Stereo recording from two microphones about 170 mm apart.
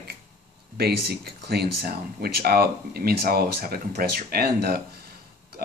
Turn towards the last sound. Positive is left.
turn(degrees=-65)  # may be behind; listen again after turning